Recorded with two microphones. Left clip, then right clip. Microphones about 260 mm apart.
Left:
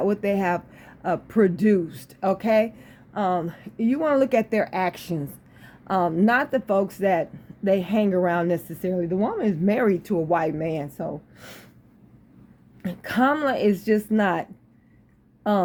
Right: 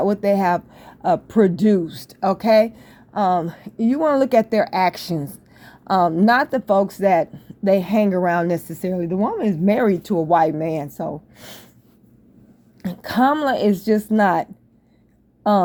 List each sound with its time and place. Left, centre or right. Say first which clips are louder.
0.0 s speech: right 5 dB; right
12.8 s speech: right 4 dB; right